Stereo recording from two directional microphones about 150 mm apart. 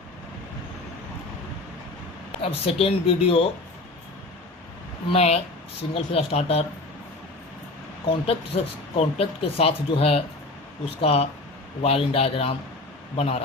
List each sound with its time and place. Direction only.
2.4 s speech: 40° left (ahead or behind)
5.1 s speech: 45° left (ahead or behind)
8.0 s speech: 40° left (ahead or behind)